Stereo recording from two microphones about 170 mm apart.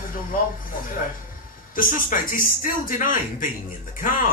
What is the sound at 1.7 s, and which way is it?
Speech, 55° left (ahead or behind).